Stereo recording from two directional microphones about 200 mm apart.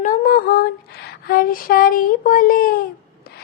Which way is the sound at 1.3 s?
45° left (ahead or behind).